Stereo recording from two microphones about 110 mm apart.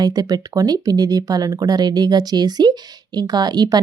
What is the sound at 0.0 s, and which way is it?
Speech, 35° right (ahead or behind).